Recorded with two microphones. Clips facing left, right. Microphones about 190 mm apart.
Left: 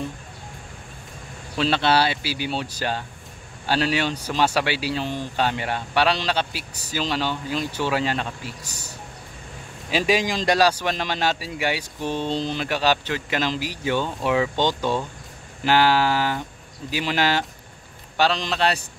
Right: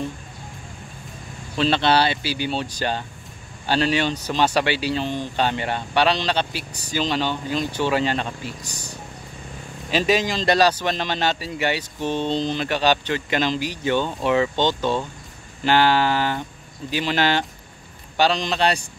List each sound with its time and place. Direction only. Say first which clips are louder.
1.6 s speech: right 1 dB; 5° left (ahead or behind)